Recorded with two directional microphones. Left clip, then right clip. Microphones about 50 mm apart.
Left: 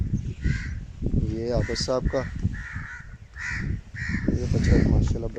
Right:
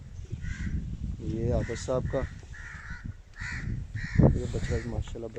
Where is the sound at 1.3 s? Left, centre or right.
Centre.